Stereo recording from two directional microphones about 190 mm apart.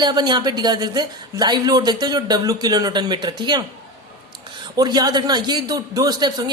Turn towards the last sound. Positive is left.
turn(degrees=-20)  # may be behind; listen again after turning